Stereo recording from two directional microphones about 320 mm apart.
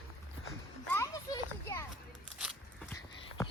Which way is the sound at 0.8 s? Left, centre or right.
Centre.